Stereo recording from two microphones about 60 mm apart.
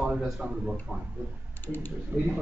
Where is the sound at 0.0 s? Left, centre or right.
Centre.